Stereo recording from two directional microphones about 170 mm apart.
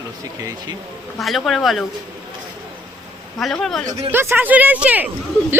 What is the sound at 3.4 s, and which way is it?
Speech, centre (ahead or behind).